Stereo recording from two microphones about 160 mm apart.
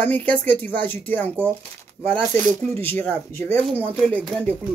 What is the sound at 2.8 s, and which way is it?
Speech, 15° left (ahead or behind).